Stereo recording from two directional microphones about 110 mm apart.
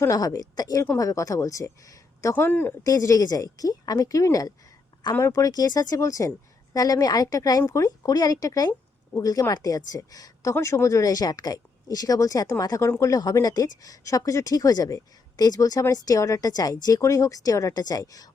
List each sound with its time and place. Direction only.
0.0 s speech: 30° left (ahead or behind)
2.3 s a woman's voice: 15° left (ahead or behind)
2.8 s speech: 35° left (ahead or behind)